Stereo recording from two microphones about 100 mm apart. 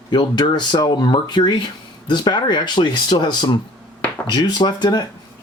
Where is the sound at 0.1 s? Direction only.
45° left (ahead or behind).